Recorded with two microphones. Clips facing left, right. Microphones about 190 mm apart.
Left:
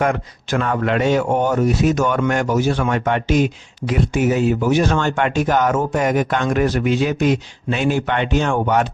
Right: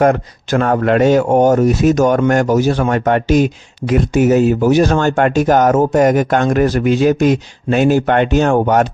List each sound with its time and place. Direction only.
0.0 s speech: 40° right (ahead or behind)